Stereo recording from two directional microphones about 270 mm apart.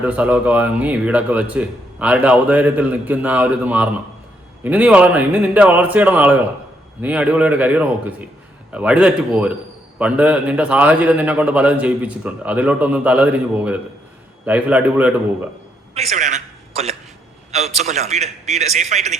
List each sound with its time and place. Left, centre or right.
0.0 s speech: centre
16.0 s a sound: right
17.7 s a man's voice: right